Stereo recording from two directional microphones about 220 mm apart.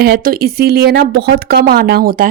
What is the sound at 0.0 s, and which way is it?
Speech, 40° right (ahead or behind).